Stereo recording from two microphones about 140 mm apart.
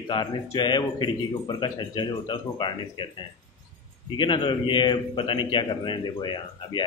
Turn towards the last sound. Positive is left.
turn(degrees=35)  # may be behind; listen again after turning